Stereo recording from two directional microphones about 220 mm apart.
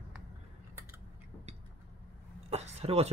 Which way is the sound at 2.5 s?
30° right (ahead or behind).